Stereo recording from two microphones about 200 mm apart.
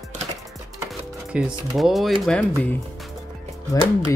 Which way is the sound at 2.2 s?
5° left (ahead or behind).